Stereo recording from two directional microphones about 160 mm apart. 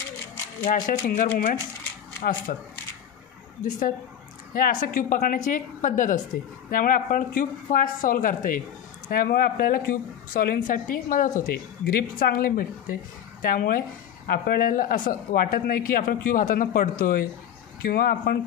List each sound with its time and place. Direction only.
0.7 s a woman's voice: 55° left (ahead or behind)
4.6 s a woman's voice: 60° left (ahead or behind)